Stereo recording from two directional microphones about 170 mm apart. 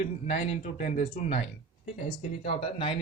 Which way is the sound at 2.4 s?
35° left (ahead or behind).